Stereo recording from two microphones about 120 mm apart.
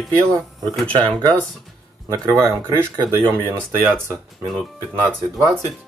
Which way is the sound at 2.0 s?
20° right (ahead or behind).